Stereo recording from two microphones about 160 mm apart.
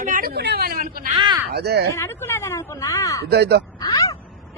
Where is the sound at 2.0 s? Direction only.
15° left (ahead or behind).